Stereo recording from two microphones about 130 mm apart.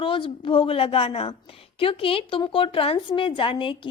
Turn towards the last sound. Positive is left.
turn(degrees=40)  # may be behind; listen again after turning